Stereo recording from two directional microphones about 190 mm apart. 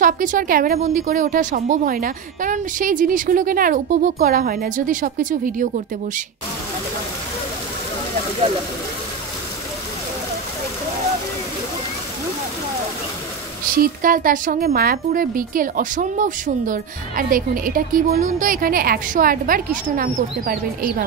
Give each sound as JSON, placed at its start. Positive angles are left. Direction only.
{"t": 0.0, "sound": "speech", "side_deg": -45}
{"t": 13.7, "sound": "speech", "side_deg": -45}